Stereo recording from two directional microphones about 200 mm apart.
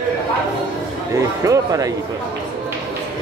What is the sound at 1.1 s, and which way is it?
Speech, 15° right (ahead or behind).